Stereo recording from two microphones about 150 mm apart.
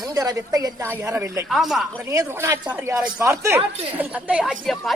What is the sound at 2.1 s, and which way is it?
A man's voice, 20° right (ahead or behind).